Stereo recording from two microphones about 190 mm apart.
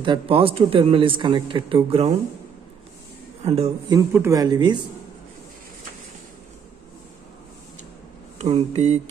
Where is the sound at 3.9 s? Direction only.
15° right (ahead or behind).